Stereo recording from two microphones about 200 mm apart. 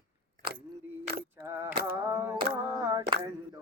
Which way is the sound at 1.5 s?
10° right (ahead or behind).